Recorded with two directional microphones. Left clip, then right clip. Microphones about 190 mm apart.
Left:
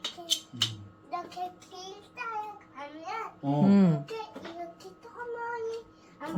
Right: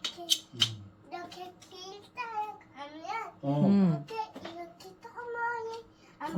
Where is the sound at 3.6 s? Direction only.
15° left (ahead or behind).